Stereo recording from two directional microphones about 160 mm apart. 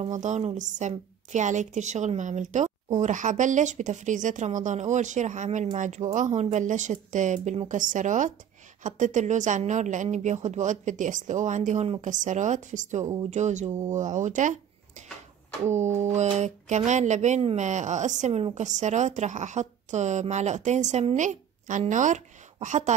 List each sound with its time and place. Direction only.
0.0 s a woman's voice: 50° right (ahead or behind)